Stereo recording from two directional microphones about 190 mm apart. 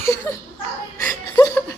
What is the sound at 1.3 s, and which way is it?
Chuckle, 15° left (ahead or behind).